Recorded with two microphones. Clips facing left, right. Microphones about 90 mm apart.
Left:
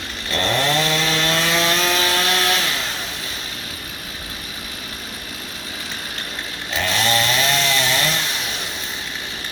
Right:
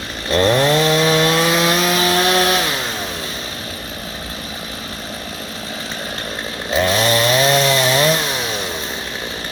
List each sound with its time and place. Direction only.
0.3 s chainsaw: 20° right (ahead or behind)
6.7 s chainsaw: 20° right (ahead or behind)